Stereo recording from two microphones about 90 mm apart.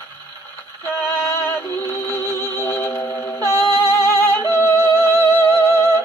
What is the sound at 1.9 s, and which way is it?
Music, 30° left (ahead or behind).